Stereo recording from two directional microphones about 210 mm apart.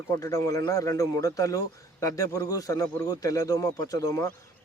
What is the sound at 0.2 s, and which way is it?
Speech, 15° left (ahead or behind).